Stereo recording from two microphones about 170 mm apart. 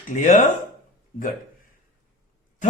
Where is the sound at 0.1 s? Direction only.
45° left (ahead or behind).